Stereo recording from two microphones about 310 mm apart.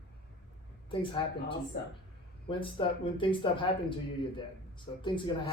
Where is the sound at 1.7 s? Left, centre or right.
Left.